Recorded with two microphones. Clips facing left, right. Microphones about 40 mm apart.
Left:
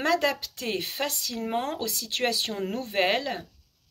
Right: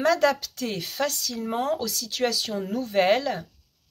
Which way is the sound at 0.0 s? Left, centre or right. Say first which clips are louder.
Right 4 dB; centre.